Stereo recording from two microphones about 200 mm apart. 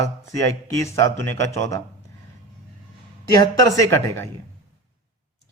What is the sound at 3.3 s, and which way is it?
Speech, 20° left (ahead or behind).